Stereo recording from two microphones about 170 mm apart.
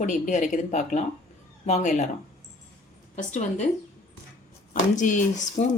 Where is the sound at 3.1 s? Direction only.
45° left (ahead or behind).